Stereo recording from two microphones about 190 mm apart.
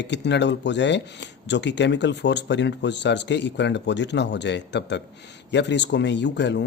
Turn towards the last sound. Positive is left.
turn(degrees=65)  # may be behind; listen again after turning